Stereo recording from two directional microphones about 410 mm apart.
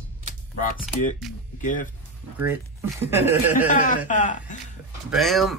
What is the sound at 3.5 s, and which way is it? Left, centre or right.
Speech, centre.